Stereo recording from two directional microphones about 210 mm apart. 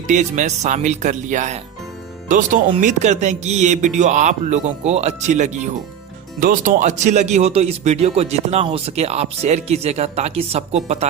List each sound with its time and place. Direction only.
0.1 s speech: 35° right (ahead or behind)
2.8 s speech: 35° right (ahead or behind)